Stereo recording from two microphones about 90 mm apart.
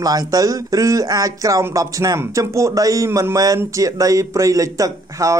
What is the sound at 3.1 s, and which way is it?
Speech, 25° right (ahead or behind).